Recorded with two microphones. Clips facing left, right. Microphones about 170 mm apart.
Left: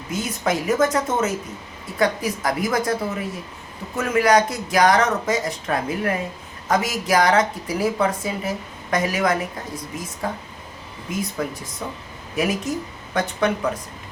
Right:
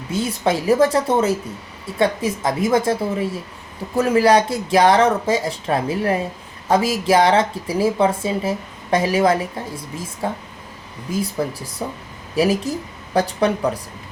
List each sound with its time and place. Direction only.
0.1 s speech: 30° right (ahead or behind)